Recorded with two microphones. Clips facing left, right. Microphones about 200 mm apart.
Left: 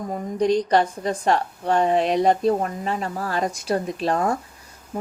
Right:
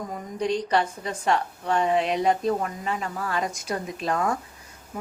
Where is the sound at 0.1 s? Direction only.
40° left (ahead or behind).